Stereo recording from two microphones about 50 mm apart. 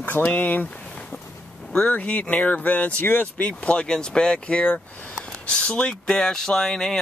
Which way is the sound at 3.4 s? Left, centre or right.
Left.